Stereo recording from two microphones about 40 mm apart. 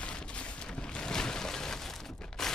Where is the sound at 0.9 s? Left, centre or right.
Centre.